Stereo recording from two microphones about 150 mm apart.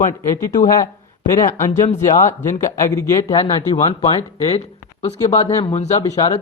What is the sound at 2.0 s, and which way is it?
Speech, 55° left (ahead or behind).